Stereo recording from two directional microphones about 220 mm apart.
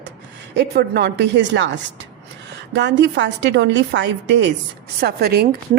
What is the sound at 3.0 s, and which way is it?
A woman's voice, 55° right (ahead or behind).